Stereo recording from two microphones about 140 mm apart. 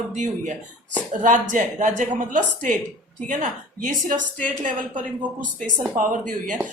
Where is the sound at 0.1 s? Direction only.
60° right (ahead or behind).